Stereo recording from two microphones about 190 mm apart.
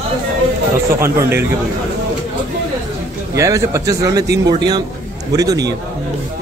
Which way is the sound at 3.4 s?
15° right (ahead or behind).